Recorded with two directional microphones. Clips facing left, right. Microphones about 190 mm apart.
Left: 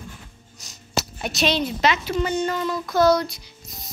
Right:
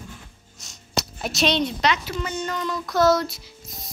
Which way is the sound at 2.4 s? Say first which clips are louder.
Left 3 dB; 5° left (ahead or behind).